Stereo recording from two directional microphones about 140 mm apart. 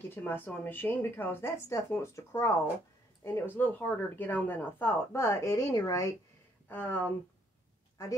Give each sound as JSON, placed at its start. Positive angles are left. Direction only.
{"t": 0.1, "sound": "speech", "side_deg": 15}
{"t": 6.7, "sound": "speech", "side_deg": 10}